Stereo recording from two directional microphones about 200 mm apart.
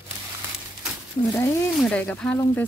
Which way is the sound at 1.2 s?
25° left (ahead or behind).